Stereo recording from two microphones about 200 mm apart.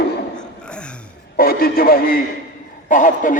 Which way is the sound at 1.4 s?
50° left (ahead or behind).